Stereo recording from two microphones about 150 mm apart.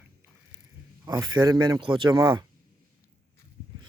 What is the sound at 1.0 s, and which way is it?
Speech, 25° right (ahead or behind).